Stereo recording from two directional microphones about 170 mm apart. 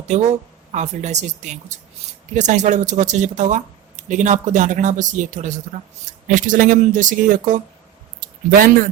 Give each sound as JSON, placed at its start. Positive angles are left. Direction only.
{"t": 0.1, "sound": "speech", "side_deg": -45}